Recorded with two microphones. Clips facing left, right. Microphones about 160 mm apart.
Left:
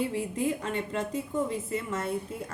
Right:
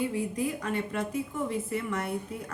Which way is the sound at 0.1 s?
25° left (ahead or behind).